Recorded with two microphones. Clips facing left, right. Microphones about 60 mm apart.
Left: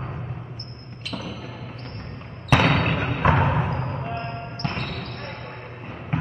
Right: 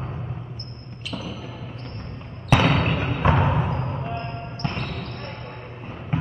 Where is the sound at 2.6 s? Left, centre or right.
Centre.